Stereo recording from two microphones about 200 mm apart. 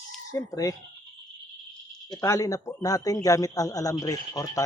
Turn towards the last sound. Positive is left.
turn(degrees=15)  # may be behind; listen again after turning